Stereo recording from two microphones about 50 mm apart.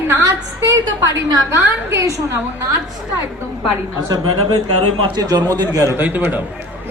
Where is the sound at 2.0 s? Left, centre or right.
Right.